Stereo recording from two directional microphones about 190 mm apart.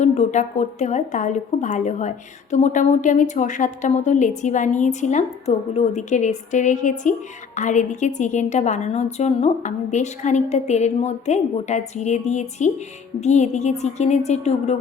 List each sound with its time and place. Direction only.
0.0 s a woman's voice: 35° left (ahead or behind)